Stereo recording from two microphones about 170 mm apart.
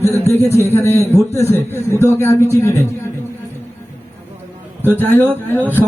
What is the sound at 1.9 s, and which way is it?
Speech, 15° right (ahead or behind).